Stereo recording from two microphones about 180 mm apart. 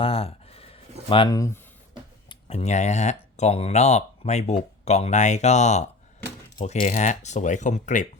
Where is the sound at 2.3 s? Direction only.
35° left (ahead or behind).